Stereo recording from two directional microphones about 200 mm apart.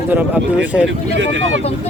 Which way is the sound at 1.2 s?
70° right (ahead or behind).